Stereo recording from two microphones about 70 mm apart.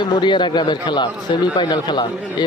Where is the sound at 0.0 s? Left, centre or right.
Left.